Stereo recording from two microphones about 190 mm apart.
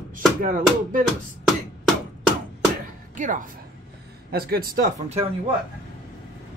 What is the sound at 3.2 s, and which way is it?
Speech, 45° right (ahead or behind).